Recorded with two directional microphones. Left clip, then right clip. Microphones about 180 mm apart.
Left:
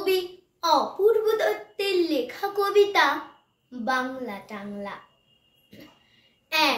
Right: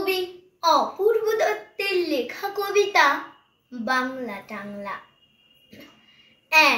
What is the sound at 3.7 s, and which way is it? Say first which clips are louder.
A child's voice: right 2 dB; 15° left (ahead or behind).